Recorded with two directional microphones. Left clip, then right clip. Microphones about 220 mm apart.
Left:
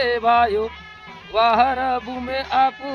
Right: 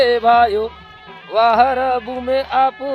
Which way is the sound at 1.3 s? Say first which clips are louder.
Right 4 dB; 20° right (ahead or behind).